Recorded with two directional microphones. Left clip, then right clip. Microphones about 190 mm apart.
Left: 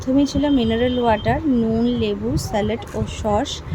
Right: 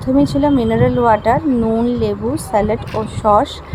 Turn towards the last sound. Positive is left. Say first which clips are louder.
# right 8 dB
turn(degrees=-10)  # may be behind; listen again after turning